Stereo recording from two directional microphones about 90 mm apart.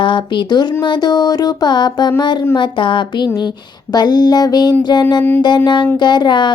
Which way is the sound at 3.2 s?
45° left (ahead or behind).